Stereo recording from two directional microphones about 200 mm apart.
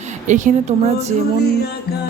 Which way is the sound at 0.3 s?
40° right (ahead or behind).